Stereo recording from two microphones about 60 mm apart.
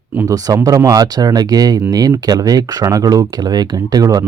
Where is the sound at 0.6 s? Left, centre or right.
Right.